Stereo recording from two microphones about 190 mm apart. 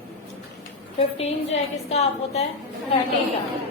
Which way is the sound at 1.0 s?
35° left (ahead or behind).